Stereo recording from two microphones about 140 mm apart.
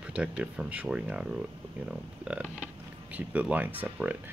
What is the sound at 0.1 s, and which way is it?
Speech, 10° right (ahead or behind).